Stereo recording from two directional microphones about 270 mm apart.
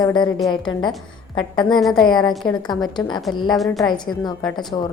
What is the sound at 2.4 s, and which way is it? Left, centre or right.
A woman's voice, centre.